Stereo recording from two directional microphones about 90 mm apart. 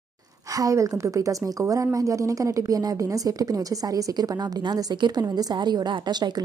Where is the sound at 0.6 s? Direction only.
35° right (ahead or behind).